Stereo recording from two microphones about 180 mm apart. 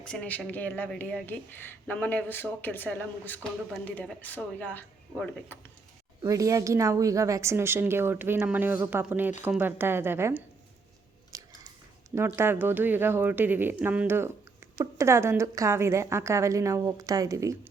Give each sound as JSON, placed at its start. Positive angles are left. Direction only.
{"t": 0.0, "sound": "speech", "side_deg": 5}
{"t": 6.2, "sound": "a woman's voice", "side_deg": -20}
{"t": 11.3, "sound": "biting", "side_deg": -20}
{"t": 12.1, "sound": "a woman's voice", "side_deg": -15}